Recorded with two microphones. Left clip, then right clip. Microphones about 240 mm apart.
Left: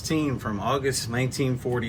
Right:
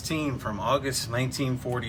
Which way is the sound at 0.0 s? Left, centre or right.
Centre.